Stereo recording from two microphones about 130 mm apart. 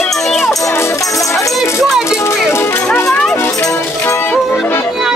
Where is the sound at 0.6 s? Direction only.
20° left (ahead or behind).